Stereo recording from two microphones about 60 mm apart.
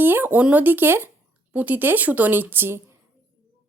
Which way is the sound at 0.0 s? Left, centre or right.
Right.